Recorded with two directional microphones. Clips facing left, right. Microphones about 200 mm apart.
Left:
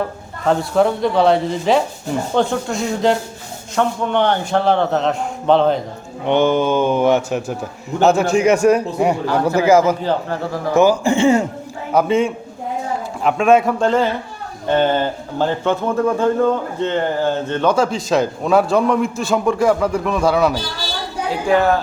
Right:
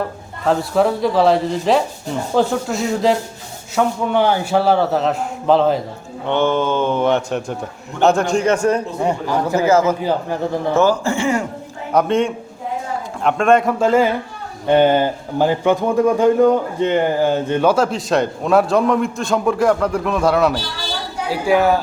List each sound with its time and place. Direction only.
0.4 s speech: centre (ahead or behind)
6.2 s a man's voice: 15° left (ahead or behind)
10.0 s a man's voice: 15° right (ahead or behind)
10.8 s speech: 15° left (ahead or behind)
11.9 s a man's voice: centre (ahead or behind)